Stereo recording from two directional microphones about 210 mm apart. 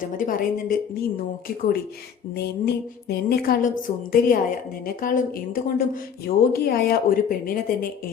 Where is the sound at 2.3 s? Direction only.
50° left (ahead or behind).